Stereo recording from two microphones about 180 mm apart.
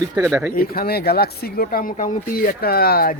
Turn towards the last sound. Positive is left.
turn(degrees=55)  # may be behind; listen again after turning